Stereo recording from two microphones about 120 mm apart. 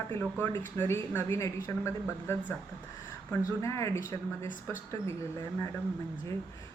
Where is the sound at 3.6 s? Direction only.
25° left (ahead or behind).